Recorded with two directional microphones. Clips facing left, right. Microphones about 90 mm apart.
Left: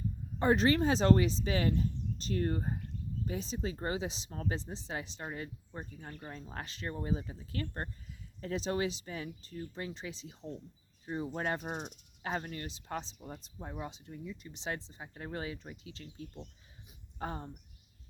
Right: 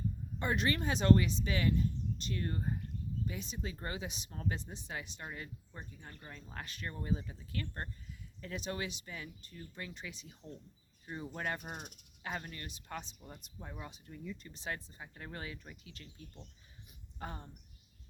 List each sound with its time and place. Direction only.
0.3 s speech: 35° left (ahead or behind)